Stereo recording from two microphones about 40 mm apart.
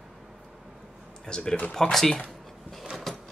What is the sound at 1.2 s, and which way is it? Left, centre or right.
Speech, centre.